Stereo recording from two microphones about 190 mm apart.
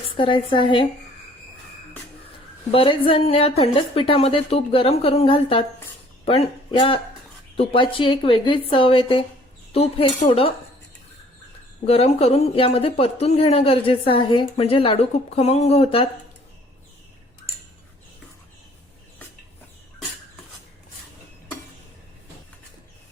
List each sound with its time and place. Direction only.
0.2 s a woman's voice: 25° left (ahead or behind)
2.7 s a woman's voice: 30° left (ahead or behind)
11.9 s speech: 35° left (ahead or behind)